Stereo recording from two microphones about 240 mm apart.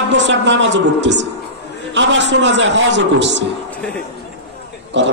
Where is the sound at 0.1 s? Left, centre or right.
Right.